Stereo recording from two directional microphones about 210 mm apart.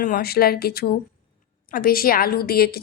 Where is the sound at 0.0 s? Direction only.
45° left (ahead or behind).